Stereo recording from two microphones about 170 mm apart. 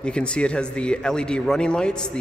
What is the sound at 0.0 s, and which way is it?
A man's voice, 5° left (ahead or behind).